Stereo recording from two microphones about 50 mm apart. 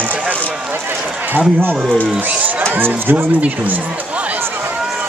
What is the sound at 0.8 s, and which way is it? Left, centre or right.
Run, right.